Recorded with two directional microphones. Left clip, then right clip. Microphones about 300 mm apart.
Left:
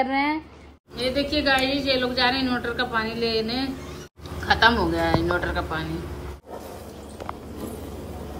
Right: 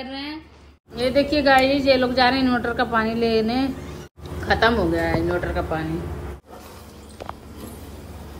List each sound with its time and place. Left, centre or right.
0.0 s a woman's voice: centre